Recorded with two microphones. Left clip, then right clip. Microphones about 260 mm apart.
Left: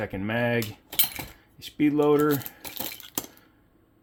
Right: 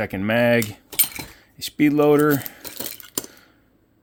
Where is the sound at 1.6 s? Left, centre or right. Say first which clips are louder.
Right 5 dB; right.